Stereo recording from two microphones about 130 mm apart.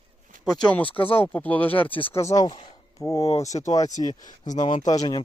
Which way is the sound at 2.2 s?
30° left (ahead or behind).